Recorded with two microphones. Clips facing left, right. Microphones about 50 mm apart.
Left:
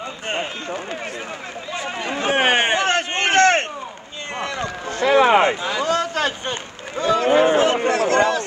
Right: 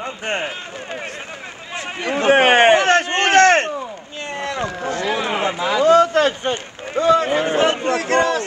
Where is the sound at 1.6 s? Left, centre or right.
Right.